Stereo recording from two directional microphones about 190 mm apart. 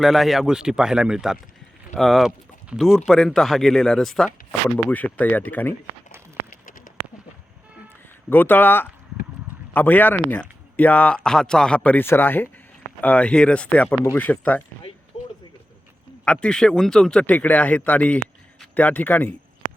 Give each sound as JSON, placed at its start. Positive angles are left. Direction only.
{"t": 0.0, "sound": "speech", "side_deg": 0}
{"t": 6.7, "sound": "bird", "side_deg": 45}
{"t": 8.3, "sound": "speech", "side_deg": 10}
{"t": 16.2, "sound": "speech", "side_deg": 5}